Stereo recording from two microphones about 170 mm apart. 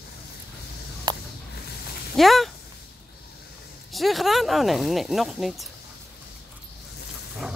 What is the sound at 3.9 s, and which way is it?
Speech, centre (ahead or behind).